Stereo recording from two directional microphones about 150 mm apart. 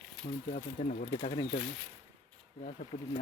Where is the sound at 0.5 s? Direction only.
55° left (ahead or behind).